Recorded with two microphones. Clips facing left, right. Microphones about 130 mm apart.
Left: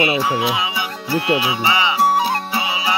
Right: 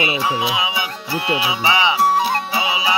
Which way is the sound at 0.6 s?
20° right (ahead or behind).